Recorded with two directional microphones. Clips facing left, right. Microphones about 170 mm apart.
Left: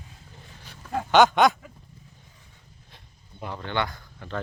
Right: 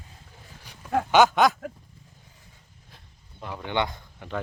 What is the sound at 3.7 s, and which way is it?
Speech, 20° right (ahead or behind).